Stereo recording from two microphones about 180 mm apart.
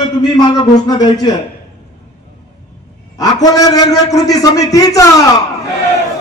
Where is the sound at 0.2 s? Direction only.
20° left (ahead or behind).